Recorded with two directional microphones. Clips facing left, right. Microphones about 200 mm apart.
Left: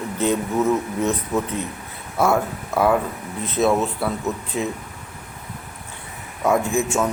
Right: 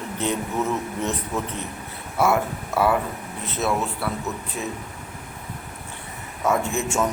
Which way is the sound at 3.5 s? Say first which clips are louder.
Left 6 dB; 20° left (ahead or behind).